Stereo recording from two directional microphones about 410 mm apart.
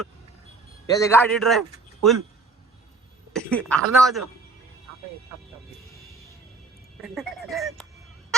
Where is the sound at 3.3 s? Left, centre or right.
Centre.